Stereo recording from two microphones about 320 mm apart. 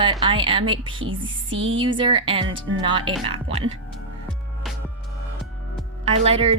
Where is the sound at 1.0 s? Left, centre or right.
Right.